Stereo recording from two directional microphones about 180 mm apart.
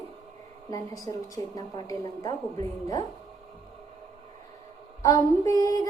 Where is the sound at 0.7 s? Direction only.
20° left (ahead or behind).